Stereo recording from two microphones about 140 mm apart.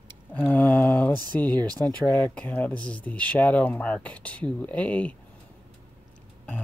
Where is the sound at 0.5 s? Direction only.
10° left (ahead or behind).